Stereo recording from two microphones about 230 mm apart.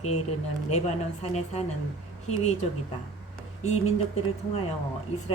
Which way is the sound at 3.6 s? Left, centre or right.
Left.